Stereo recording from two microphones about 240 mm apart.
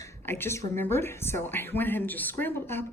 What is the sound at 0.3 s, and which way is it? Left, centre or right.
Speech, centre.